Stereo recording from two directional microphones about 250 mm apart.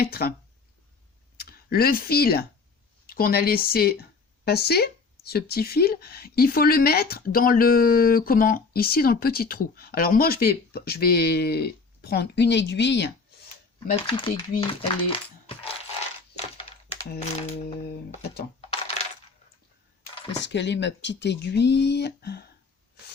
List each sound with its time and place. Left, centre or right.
0.0 s speech: left
1.4 s speech: left
13.7 s speech: left
17.1 s speech: left
20.4 s speech: left